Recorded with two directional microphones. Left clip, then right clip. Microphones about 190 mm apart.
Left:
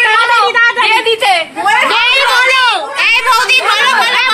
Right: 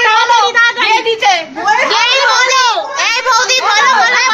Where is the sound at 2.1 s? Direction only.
25° left (ahead or behind).